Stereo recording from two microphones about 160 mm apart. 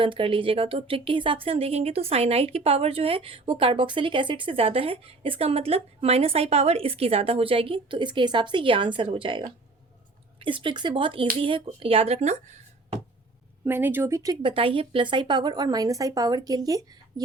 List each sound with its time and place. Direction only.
0.0 s speech: 30° right (ahead or behind)
13.7 s speech: 15° right (ahead or behind)
14.4 s speech: 35° right (ahead or behind)